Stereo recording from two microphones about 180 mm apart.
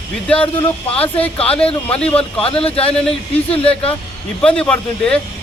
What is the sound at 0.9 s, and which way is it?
Speech, 10° left (ahead or behind).